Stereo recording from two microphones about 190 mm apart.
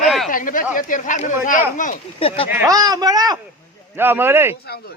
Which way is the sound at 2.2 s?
30° left (ahead or behind).